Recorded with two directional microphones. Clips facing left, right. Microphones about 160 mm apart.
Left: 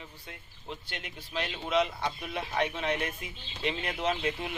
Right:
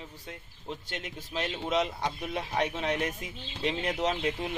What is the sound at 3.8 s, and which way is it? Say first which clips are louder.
Speech: right 2 dB; 20° right (ahead or behind).